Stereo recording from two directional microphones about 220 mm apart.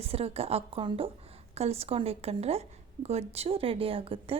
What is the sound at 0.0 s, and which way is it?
A woman's voice, 25° right (ahead or behind).